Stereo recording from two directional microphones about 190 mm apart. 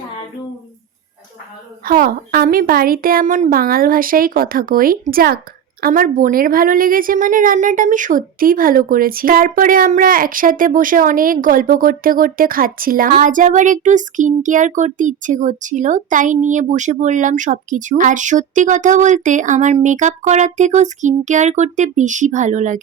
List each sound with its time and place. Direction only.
1.8 s a woman's voice: 50° right (ahead or behind)